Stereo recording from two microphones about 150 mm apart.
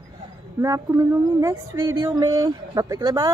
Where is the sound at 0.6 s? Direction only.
20° right (ahead or behind).